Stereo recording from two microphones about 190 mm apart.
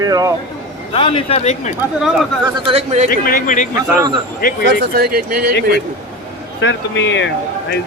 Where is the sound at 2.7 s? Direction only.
35° right (ahead or behind).